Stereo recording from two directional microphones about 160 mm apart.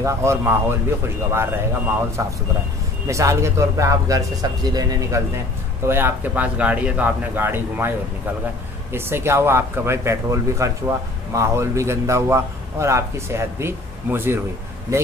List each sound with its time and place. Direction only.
0.0 s speech: 15° right (ahead or behind)
8.9 s speech: 15° right (ahead or behind)